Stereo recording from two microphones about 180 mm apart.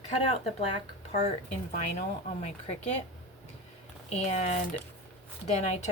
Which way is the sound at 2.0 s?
40° left (ahead or behind).